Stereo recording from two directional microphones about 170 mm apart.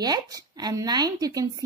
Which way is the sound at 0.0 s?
20° right (ahead or behind).